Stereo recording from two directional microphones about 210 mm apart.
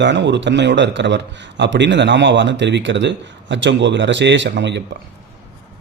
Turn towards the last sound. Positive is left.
turn(degrees=-55)  # may be behind; listen again after turning